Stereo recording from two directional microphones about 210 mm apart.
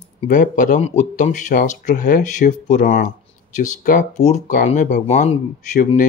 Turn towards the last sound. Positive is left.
turn(degrees=40)  # may be behind; listen again after turning